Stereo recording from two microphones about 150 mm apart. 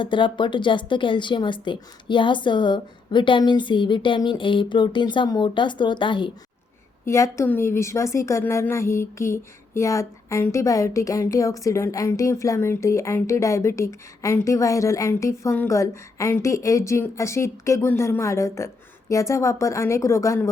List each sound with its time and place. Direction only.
0.0 s a woman's voice: 35° left (ahead or behind)
7.0 s a woman's voice: 20° left (ahead or behind)